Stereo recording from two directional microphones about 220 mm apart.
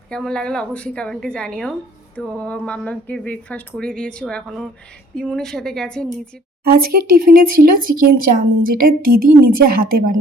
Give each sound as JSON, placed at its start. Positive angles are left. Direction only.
{"t": 0.1, "sound": "speech", "side_deg": 5}
{"t": 6.7, "sound": "speech", "side_deg": -45}